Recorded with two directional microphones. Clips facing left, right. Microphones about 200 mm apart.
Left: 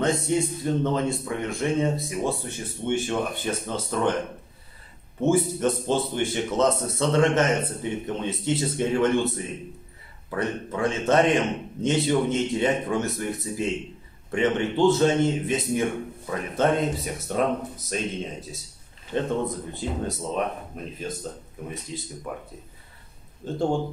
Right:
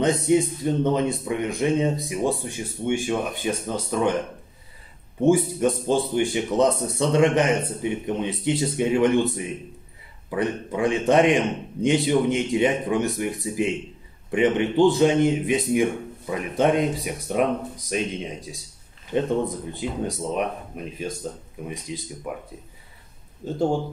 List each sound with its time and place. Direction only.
0.0 s a man's voice: 15° right (ahead or behind)
5.2 s a man's voice: 15° right (ahead or behind)
20.1 s a man's voice: 15° right (ahead or behind)
23.4 s a man's voice: 5° right (ahead or behind)